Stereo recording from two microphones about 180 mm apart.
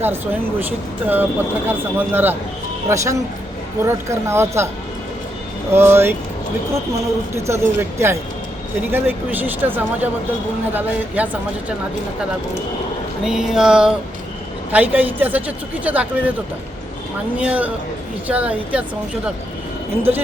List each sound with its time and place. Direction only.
0.6 s speech: 10° right (ahead or behind)
5.7 s speech: 15° right (ahead or behind)
7.3 s speech: 15° right (ahead or behind)
13.2 s speech: 5° right (ahead or behind)
17.3 s speech: 10° right (ahead or behind)